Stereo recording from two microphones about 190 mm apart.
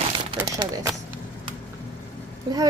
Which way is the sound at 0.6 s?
20° right (ahead or behind).